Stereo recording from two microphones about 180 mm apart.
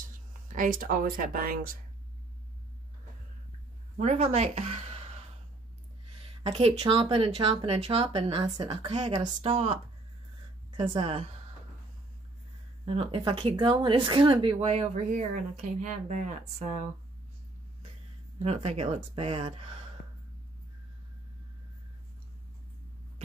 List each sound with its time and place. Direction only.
0.5 s speech: 50° right (ahead or behind)
3.9 s speech: 40° right (ahead or behind)
6.2 s a sound: 35° right (ahead or behind)
6.8 s speech: 30° right (ahead or behind)
10.8 s speech: 30° right (ahead or behind)
12.8 s speech: 30° right (ahead or behind)
18.4 s speech: 35° right (ahead or behind)